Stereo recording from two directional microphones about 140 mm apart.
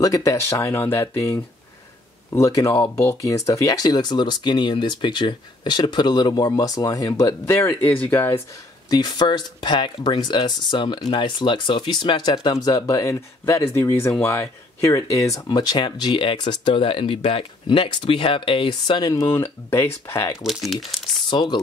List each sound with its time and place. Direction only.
0.0 s speech: 25° left (ahead or behind)
8.9 s speech: 30° left (ahead or behind)
20.4 s speech: centre (ahead or behind)
21.3 s speech: 35° left (ahead or behind)